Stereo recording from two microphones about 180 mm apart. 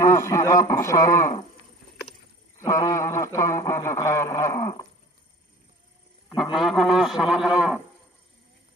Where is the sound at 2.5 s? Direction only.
20° left (ahead or behind).